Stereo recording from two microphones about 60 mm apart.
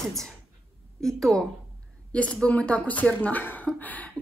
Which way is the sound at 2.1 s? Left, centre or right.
Left.